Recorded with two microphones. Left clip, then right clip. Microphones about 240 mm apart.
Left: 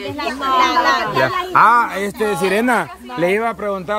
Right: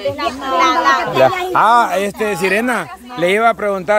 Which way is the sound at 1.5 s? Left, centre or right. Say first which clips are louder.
Right 1 dB; right.